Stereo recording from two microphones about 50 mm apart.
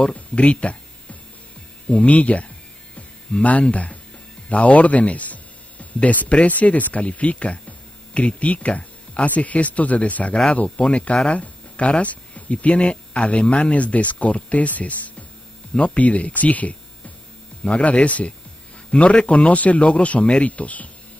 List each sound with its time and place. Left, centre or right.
0.0 s a man's voice: left
1.9 s a man's voice: left